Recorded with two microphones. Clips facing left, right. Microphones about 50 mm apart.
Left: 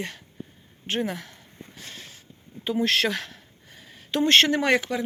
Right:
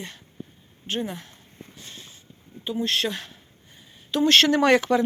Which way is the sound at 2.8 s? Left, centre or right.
Left.